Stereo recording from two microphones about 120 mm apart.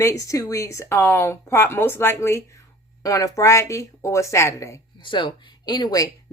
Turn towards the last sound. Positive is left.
turn(degrees=35)  # may be behind; listen again after turning